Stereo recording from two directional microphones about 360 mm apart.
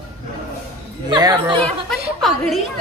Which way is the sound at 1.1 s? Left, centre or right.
Centre.